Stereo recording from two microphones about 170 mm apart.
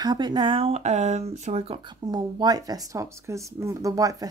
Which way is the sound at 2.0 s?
25° right (ahead or behind).